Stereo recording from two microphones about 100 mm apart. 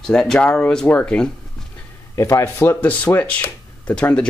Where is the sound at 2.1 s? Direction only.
30° left (ahead or behind).